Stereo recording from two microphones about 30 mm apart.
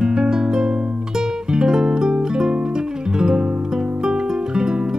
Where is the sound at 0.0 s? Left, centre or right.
Right.